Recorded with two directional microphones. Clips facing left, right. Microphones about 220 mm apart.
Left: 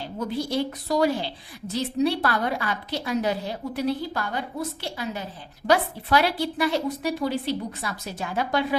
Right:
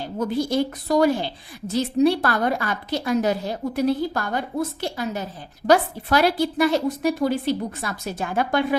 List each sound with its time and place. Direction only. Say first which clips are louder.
0.0 s a woman's voice: right 5 dB; 45° right (ahead or behind)